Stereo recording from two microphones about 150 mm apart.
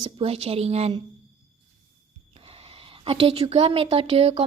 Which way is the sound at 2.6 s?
40° right (ahead or behind).